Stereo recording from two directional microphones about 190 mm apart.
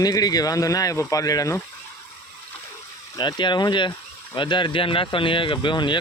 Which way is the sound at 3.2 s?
25° left (ahead or behind).